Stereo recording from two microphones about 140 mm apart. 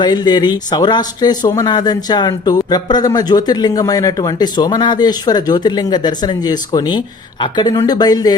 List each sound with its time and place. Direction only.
0.0 s speech: 30° left (ahead or behind)